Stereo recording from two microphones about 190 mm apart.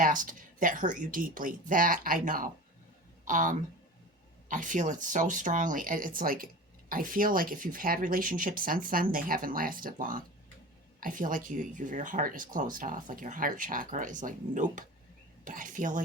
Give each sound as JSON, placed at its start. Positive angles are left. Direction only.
{"t": 0.0, "sound": "speech", "side_deg": -45}